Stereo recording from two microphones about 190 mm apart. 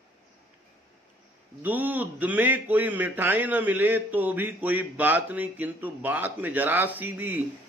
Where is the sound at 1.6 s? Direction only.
10° right (ahead or behind).